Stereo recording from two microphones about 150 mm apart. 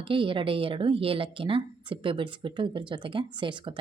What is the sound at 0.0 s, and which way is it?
Speech, 35° right (ahead or behind).